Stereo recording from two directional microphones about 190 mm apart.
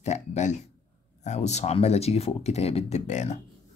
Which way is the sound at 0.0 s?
35° left (ahead or behind).